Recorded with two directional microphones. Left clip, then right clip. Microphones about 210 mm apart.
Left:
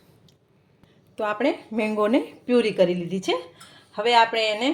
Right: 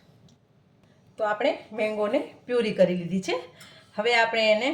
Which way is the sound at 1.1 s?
40° left (ahead or behind).